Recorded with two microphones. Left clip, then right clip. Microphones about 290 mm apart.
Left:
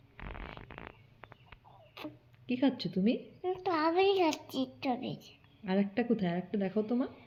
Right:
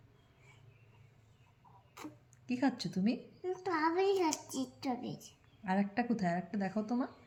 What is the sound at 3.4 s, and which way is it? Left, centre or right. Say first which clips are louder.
A child's voice: left 2 dB; centre.